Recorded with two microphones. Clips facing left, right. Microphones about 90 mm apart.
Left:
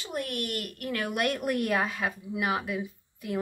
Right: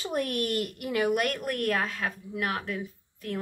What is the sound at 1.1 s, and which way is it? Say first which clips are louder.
A woman's voice: left 1 dB; centre (ahead or behind).